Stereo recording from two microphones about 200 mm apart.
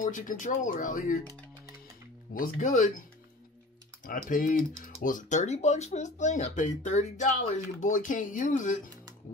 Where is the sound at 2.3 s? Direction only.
40° left (ahead or behind).